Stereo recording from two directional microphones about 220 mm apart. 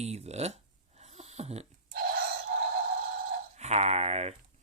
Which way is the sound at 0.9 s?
30° right (ahead or behind).